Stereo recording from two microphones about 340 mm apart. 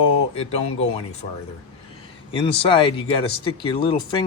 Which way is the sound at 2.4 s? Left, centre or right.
Centre.